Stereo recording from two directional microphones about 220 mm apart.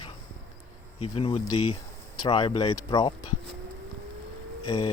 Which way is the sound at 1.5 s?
90° left.